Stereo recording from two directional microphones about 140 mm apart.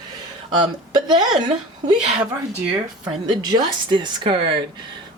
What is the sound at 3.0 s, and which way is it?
Speech, 35° right (ahead or behind).